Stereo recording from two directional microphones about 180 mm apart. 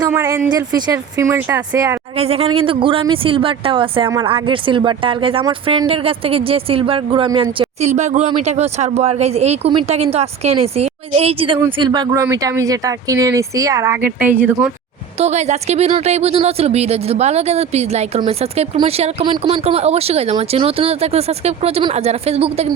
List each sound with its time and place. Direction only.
0.0 s speech: 15° right (ahead or behind)
2.1 s speech: 35° right (ahead or behind); by 14.5 s 10° right (ahead or behind)
15.2 s speech: 40° right (ahead or behind)